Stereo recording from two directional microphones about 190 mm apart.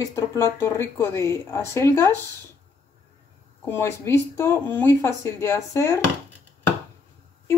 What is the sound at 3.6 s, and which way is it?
Speech, 10° left (ahead or behind).